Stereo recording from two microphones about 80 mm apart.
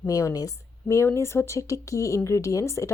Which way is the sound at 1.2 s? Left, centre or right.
Left.